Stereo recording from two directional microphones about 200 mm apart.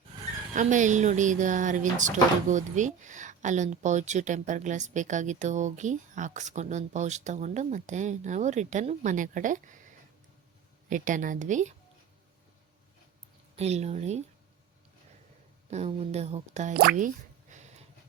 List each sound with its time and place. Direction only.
0.5 s speech: 40° right (ahead or behind)
10.8 s speech: 40° right (ahead or behind)
13.6 s speech: 35° right (ahead or behind)
15.7 s speech: 30° right (ahead or behind)
16.7 s speech: 50° right (ahead or behind)
17.5 s a sound: 35° right (ahead or behind)